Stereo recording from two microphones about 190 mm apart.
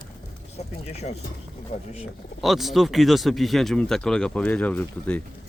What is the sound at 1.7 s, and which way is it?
Speech, 45° left (ahead or behind).